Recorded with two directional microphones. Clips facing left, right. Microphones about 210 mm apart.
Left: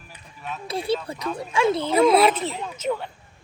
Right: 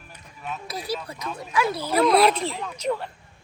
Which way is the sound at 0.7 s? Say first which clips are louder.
Left 8 dB; 25° left (ahead or behind).